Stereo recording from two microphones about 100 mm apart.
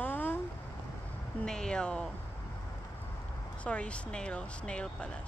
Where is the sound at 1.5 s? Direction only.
5° left (ahead or behind).